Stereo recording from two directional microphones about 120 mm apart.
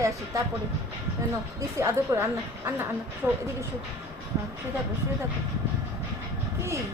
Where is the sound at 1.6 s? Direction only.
25° right (ahead or behind).